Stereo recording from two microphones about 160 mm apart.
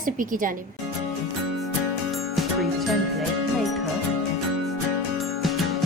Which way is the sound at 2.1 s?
Centre (ahead or behind).